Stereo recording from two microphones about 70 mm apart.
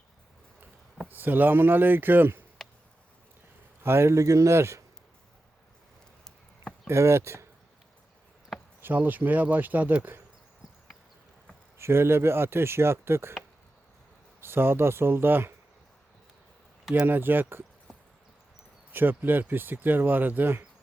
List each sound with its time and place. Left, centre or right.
1.0 s speech: right
3.8 s speech: right
6.8 s speech: right
8.8 s speech: right
11.8 s speech: right
14.4 s speech: right
17.1 s speech: right
18.9 s speech: right